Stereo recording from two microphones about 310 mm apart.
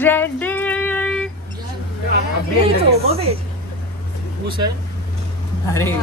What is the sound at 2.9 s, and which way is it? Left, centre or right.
Speech, centre.